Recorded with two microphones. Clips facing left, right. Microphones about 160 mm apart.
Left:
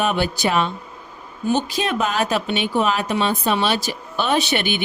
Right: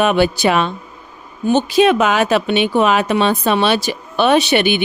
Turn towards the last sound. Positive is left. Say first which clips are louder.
# right 7 dB
turn(degrees=-75)  # may be behind; listen again after turning